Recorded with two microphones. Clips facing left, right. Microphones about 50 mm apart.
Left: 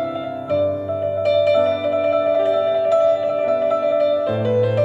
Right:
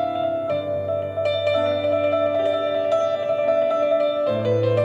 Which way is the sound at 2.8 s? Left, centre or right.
Centre.